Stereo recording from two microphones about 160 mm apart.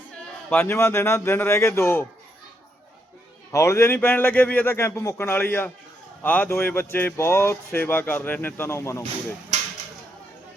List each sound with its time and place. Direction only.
0.5 s speech: 15° left (ahead or behind)
3.5 s speech: 20° left (ahead or behind)